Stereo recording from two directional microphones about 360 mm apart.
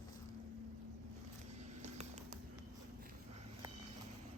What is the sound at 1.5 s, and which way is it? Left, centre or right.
Vehicle, centre.